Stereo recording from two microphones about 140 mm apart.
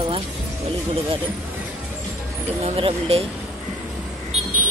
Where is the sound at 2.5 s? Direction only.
45° right (ahead or behind).